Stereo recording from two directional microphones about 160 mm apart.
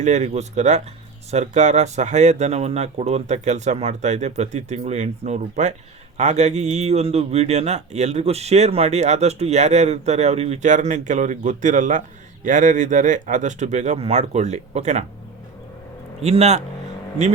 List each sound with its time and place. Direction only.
0.0 s a man's voice: 50° right (ahead or behind)
16.2 s a man's voice: 40° right (ahead or behind)